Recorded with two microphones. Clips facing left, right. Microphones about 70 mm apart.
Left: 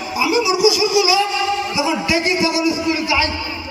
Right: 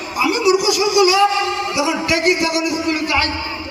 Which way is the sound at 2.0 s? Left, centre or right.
Right.